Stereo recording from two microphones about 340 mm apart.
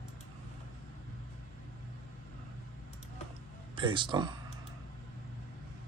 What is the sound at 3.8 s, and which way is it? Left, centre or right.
Speech, centre.